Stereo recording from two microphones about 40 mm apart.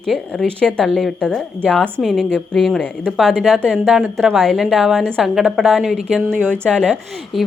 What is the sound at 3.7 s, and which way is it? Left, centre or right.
Speech, centre.